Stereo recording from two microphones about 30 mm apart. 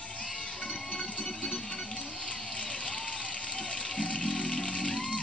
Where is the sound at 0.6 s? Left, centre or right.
Left.